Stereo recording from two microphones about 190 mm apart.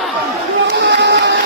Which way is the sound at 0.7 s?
65° right (ahead or behind).